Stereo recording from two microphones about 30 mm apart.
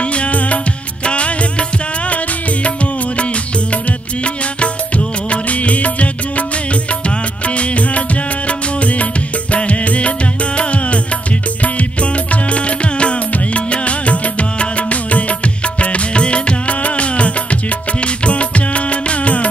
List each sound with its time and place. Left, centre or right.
0.0 s music: left
1.0 s music: left
16.6 s music: left